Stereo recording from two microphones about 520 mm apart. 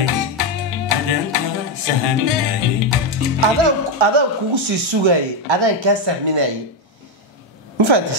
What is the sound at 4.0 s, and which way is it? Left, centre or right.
Speech, right.